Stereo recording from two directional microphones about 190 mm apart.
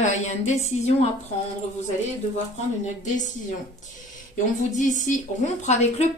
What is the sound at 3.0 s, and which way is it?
Speech, 40° left (ahead or behind).